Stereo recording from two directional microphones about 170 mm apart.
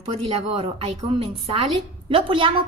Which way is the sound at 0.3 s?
35° right (ahead or behind).